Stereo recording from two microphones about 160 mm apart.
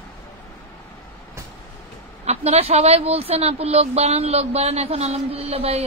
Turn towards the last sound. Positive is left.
turn(degrees=-40)  # may be behind; listen again after turning